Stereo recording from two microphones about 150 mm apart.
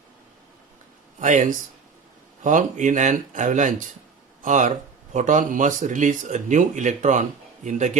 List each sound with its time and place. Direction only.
1.2 s speech: 55° right (ahead or behind)